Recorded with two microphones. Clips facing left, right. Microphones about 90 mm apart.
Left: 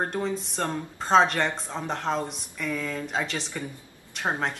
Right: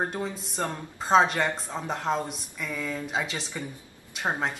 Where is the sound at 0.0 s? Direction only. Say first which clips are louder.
Left 2 dB; 5° right (ahead or behind).